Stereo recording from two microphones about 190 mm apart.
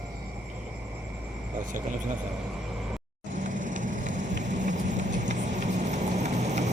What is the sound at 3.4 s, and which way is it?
Vehicle, 40° right (ahead or behind).